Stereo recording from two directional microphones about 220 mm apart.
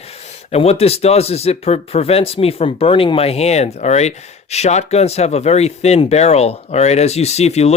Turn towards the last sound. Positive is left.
turn(degrees=30)  # may be behind; listen again after turning